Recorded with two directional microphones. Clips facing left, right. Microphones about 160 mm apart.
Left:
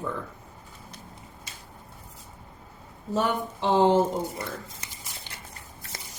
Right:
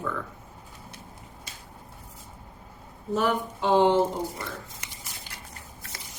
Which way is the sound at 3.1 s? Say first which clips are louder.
Right 1 dB; 30° left (ahead or behind).